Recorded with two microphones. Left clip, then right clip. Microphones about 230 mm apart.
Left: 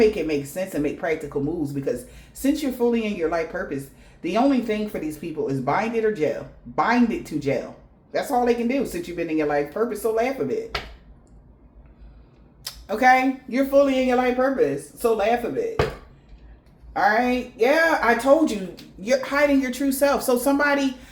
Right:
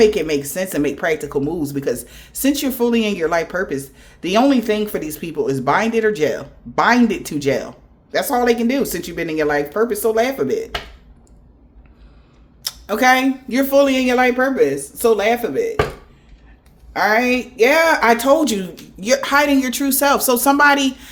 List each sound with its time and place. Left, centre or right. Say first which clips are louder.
0.0 s speech: right 5 dB; right
12.6 s speech: right 3 dB; right
16.9 s speech: right 4 dB; right
18.0 s speech: right 4 dB; right